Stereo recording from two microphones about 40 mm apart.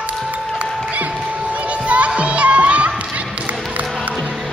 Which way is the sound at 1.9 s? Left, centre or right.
Right.